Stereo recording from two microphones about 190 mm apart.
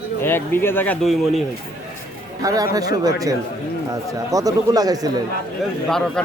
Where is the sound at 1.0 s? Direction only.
Centre (ahead or behind).